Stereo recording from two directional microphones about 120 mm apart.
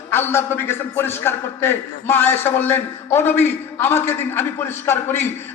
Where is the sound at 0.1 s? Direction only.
20° left (ahead or behind).